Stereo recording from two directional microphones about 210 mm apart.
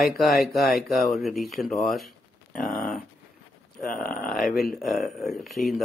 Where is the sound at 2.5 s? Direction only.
40° left (ahead or behind).